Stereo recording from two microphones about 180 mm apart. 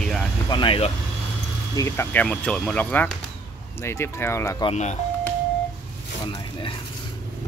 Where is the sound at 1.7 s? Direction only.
15° left (ahead or behind).